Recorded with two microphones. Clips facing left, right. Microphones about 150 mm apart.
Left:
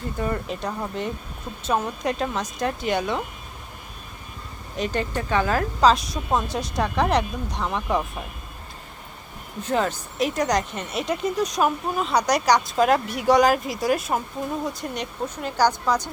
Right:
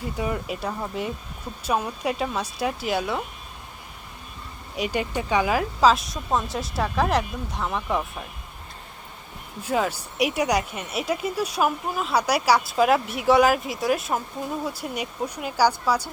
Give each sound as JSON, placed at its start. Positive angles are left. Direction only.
{"t": 0.0, "sound": "speech", "side_deg": -10}
{"t": 4.8, "sound": "speech", "side_deg": -10}
{"t": 9.6, "sound": "speech", "side_deg": -5}